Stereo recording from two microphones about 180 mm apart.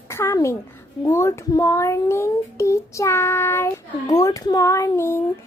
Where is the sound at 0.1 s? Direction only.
15° left (ahead or behind).